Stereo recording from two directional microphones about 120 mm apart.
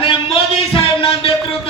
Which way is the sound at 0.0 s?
50° left (ahead or behind).